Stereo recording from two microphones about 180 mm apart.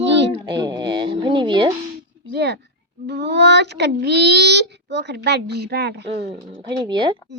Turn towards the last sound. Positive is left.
turn(degrees=-25)  # may be behind; listen again after turning